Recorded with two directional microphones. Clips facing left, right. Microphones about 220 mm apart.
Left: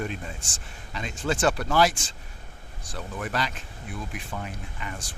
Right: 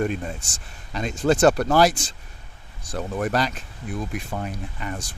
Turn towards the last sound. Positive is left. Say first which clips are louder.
# right 5 dB
turn(degrees=-45)  # may be behind; listen again after turning